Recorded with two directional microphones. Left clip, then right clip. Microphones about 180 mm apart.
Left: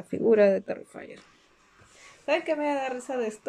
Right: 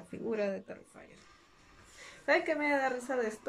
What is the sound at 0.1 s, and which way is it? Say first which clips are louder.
Speech: left 14 dB; 45° left (ahead or behind).